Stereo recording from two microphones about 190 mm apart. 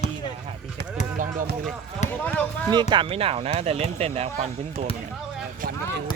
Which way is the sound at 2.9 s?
30° right (ahead or behind).